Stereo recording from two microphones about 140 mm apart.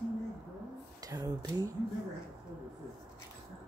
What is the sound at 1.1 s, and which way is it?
Speech, 25° right (ahead or behind).